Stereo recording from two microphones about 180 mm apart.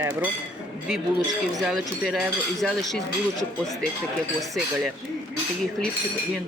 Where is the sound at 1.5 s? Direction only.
Centre (ahead or behind).